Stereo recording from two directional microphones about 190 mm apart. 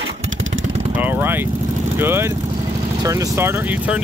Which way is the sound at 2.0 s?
10° right (ahead or behind).